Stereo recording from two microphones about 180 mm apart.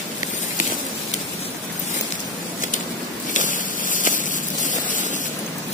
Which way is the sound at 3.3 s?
45° left (ahead or behind).